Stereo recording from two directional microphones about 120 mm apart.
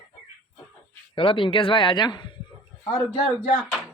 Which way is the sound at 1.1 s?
45° left (ahead or behind).